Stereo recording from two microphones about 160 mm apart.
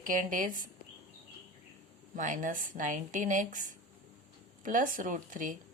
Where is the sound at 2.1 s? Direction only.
50° right (ahead or behind).